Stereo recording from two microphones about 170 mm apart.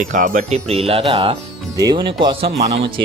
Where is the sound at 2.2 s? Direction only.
35° right (ahead or behind).